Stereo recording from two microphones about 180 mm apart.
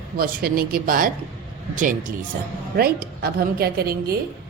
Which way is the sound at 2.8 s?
60° right (ahead or behind).